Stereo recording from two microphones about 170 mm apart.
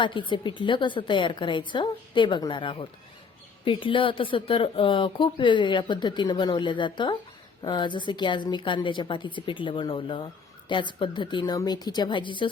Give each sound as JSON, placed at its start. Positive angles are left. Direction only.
{"t": 0.0, "sound": "speech", "side_deg": 30}